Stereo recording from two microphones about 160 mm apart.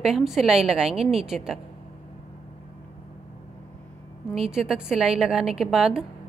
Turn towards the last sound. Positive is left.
turn(degrees=0)  # may be behind; listen again after turning